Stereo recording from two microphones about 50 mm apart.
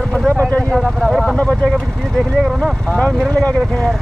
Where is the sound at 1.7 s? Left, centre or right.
Centre.